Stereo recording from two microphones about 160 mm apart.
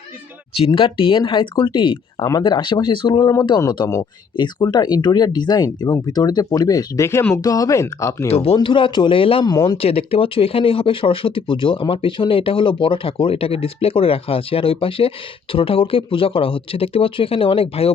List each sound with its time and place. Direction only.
0.7 s speech: 30° left (ahead or behind)
8.3 s speech: 40° left (ahead or behind)